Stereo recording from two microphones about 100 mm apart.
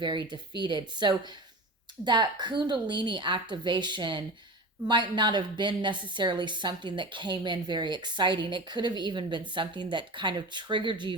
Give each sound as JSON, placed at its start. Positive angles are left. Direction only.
{"t": 0.0, "sound": "a woman's voice", "side_deg": -50}